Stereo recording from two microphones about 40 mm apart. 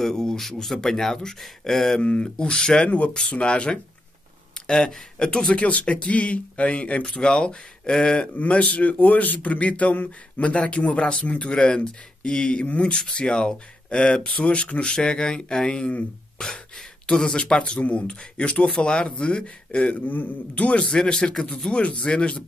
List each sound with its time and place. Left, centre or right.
0.0 s speech: centre
2.0 s speech: left
5.5 s speech: left
7.2 s speech: centre
8.4 s speech: left
11.5 s speech: left
12.9 s speech: left
15.0 s speech: centre
17.1 s speech: centre
17.7 s speech: left
20.1 s a man's voice: left
20.6 s speech: left